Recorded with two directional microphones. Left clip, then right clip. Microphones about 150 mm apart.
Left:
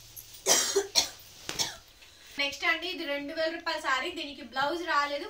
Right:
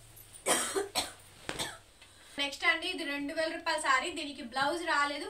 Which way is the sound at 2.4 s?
5° right (ahead or behind).